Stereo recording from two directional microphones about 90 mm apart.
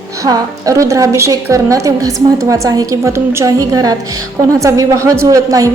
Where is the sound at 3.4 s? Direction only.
40° right (ahead or behind).